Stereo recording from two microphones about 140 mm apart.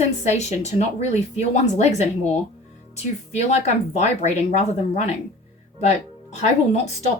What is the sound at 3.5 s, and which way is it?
Speech, 55° left (ahead or behind).